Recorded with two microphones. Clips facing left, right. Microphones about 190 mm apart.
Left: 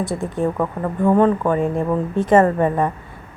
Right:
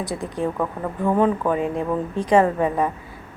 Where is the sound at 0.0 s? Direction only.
Centre (ahead or behind).